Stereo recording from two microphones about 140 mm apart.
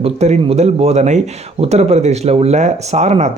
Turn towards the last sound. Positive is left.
turn(degrees=-50)  # may be behind; listen again after turning